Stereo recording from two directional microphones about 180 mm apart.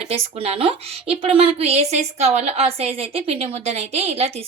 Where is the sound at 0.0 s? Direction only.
35° right (ahead or behind).